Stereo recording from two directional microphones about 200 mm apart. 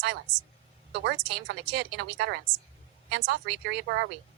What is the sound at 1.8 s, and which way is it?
Speech, 60° right (ahead or behind).